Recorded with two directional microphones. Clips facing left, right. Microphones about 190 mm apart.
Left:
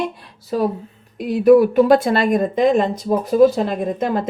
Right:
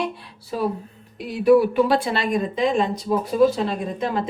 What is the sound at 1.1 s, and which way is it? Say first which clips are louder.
Speech: left 4 dB; 45° left (ahead or behind).